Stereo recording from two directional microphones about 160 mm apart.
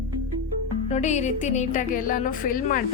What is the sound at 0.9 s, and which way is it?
Speech, 45° left (ahead or behind).